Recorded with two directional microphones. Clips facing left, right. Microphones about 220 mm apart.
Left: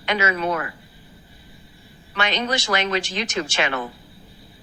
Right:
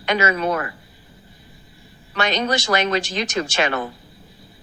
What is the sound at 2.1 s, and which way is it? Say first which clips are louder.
A woman's voice: right 3 dB; 40° right (ahead or behind).